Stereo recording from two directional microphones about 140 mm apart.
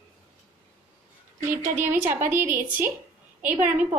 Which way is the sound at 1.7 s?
15° right (ahead or behind).